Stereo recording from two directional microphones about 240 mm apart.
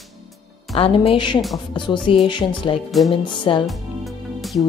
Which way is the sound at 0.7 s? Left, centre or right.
Left.